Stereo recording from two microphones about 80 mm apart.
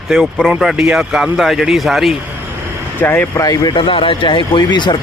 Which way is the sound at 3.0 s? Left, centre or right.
Left.